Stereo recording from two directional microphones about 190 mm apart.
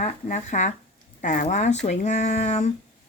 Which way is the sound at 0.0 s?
40° left (ahead or behind).